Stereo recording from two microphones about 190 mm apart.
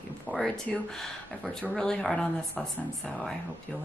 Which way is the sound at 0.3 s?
10° left (ahead or behind).